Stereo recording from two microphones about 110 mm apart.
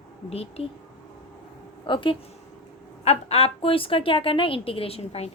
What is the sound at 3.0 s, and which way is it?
A woman's voice, 80° left.